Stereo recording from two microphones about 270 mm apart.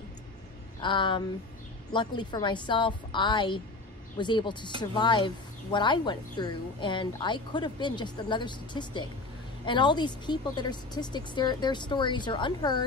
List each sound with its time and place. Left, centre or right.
0.8 s speech: centre